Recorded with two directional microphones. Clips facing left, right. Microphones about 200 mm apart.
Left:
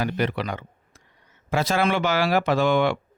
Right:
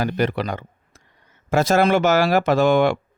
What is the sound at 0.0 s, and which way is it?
Speech, 45° right (ahead or behind).